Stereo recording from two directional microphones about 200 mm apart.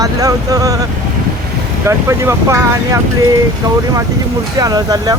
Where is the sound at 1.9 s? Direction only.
15° right (ahead or behind).